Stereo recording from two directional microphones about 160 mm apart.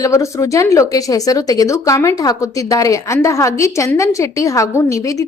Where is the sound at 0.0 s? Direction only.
20° left (ahead or behind).